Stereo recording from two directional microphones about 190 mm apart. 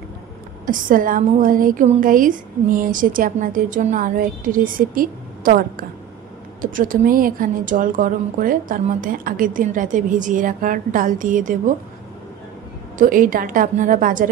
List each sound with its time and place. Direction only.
0.7 s a woman's voice: 45° right (ahead or behind)
12.9 s a woman's voice: 45° right (ahead or behind)